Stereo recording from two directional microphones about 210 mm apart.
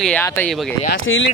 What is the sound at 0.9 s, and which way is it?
Speech, 65° left (ahead or behind).